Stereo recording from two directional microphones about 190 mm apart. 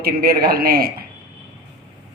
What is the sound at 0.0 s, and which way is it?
Speech, 55° right (ahead or behind).